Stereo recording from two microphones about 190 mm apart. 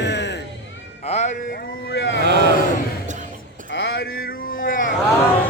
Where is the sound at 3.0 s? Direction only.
40° right (ahead or behind).